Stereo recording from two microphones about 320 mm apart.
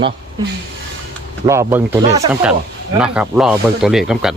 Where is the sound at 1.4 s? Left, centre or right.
Centre.